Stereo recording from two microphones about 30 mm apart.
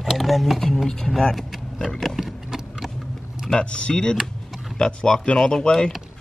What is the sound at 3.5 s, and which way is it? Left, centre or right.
Speech, left.